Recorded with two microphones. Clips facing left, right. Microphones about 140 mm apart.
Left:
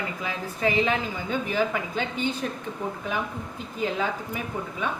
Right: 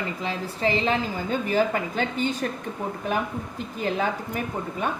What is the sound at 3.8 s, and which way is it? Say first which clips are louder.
Speech: right 1 dB; 55° right (ahead or behind).